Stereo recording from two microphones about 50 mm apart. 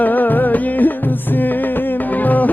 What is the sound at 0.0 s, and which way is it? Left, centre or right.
Music, left.